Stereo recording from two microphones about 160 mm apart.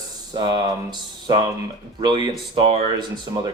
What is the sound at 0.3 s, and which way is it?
Speech, 30° right (ahead or behind).